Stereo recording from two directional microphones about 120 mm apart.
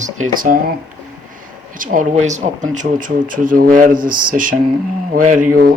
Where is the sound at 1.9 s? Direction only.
85° right.